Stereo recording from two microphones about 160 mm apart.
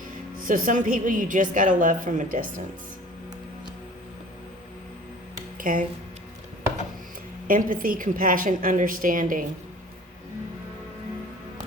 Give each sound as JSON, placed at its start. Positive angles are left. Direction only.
{"t": 0.4, "sound": "a woman's voice", "side_deg": -60}
{"t": 5.5, "sound": "speech", "side_deg": -60}
{"t": 7.4, "sound": "a woman's voice", "side_deg": -60}